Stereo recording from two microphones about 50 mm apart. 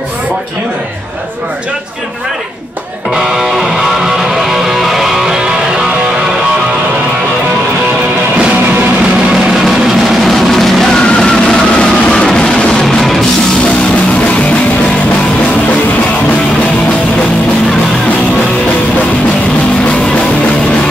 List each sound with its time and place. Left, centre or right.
3.2 s music: centre
10.2 s music: centre
11.4 s music: centre